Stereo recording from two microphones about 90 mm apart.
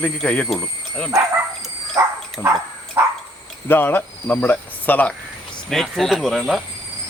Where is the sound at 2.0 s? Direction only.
35° right (ahead or behind).